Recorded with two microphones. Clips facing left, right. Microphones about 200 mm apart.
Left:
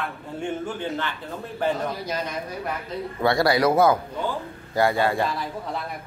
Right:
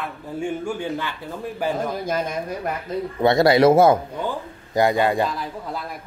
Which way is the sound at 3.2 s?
20° right (ahead or behind).